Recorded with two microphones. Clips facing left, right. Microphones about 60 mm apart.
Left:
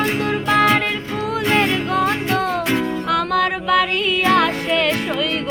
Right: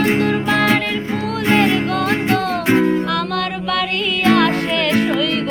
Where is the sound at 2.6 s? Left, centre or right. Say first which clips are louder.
Right 6 dB; right.